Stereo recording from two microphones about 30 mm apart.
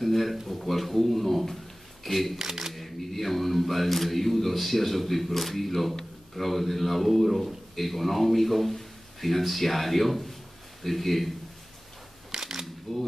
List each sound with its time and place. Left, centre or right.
0.0 s a sound: centre
0.5 s a man's voice: centre
2.3 s speech: centre
2.7 s a man's voice: centre
12.3 s camera: centre
12.9 s a sound: centre